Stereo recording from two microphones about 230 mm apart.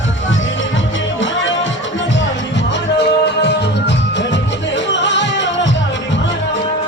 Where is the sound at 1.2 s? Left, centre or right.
Left.